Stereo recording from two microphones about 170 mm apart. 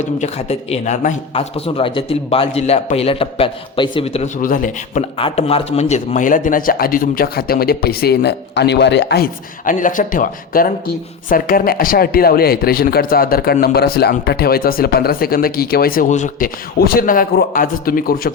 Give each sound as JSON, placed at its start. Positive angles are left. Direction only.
{"t": 0.0, "sound": "a man's voice", "side_deg": 40}
{"t": 4.4, "sound": "speech", "side_deg": 50}
{"t": 5.1, "sound": "a man's voice", "side_deg": 35}